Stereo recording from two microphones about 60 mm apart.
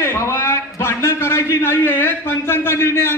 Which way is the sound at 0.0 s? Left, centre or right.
Left.